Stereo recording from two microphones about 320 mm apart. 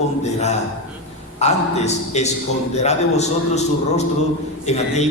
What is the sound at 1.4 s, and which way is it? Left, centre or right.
A man's voice, left.